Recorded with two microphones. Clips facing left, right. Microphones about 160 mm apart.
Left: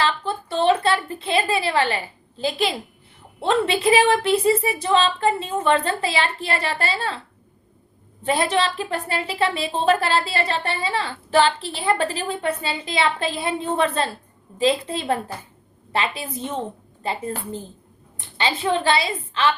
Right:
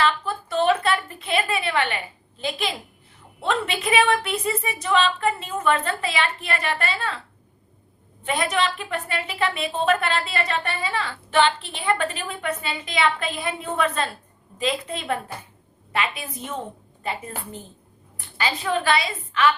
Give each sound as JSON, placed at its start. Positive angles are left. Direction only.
{"t": 0.0, "sound": "a sound", "side_deg": 30}
{"t": 2.4, "sound": "a woman's voice", "side_deg": 30}
{"t": 8.2, "sound": "a woman's voice", "side_deg": 30}